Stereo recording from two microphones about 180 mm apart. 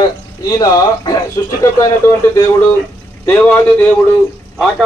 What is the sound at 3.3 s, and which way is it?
Speech, 10° left (ahead or behind).